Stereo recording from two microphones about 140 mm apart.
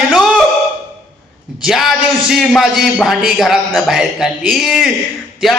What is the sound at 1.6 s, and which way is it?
A man's voice, centre (ahead or behind).